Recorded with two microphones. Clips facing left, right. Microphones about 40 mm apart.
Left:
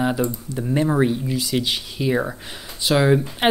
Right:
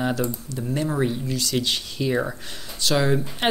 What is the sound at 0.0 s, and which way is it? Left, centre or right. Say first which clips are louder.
Speech: left 3 dB; centre.